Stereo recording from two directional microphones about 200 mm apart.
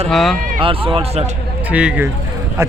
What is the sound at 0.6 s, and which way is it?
Speech, 25° right (ahead or behind).